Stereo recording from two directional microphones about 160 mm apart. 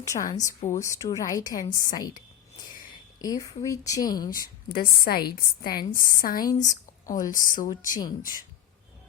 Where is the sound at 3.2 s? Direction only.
25° left (ahead or behind).